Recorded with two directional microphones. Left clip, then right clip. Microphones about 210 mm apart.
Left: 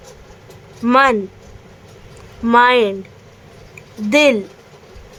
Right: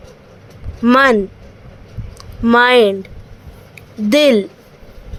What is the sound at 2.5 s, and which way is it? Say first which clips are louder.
Speech: right 2 dB; 15° right (ahead or behind).